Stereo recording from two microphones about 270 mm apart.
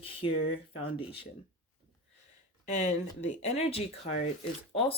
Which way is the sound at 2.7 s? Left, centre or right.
Left.